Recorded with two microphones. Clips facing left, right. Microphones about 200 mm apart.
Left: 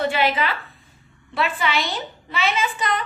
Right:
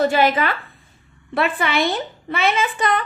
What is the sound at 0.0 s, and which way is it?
A woman's voice, 45° right (ahead or behind).